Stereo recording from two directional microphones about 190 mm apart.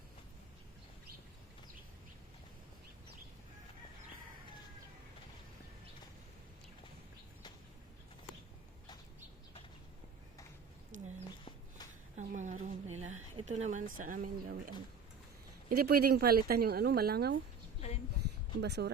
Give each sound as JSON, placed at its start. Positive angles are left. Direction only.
{"t": 12.1, "sound": "a sound", "side_deg": -40}
{"t": 13.3, "sound": "speech", "side_deg": -35}
{"t": 15.8, "sound": "a woman's voice", "side_deg": -55}
{"t": 18.6, "sound": "a woman's voice", "side_deg": -60}